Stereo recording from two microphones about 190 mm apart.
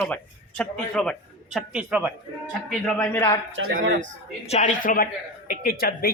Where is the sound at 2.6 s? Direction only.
5° left (ahead or behind).